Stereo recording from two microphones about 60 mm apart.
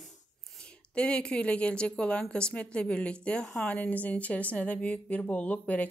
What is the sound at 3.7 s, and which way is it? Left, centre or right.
Speech, left.